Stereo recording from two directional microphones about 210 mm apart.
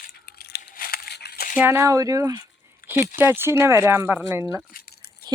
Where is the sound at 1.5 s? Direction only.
10° right (ahead or behind).